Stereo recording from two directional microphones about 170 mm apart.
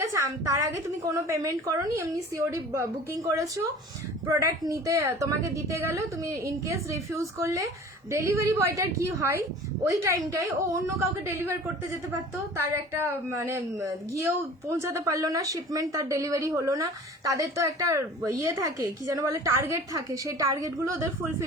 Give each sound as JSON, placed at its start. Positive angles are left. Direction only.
{"t": 0.0, "sound": "a woman's voice", "side_deg": -20}